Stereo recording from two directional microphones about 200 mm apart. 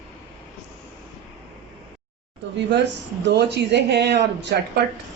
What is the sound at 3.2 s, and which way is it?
Speech, 60° right (ahead or behind).